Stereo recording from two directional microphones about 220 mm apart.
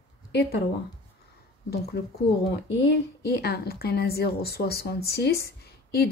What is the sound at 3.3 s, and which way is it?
Speech, 45° left (ahead or behind).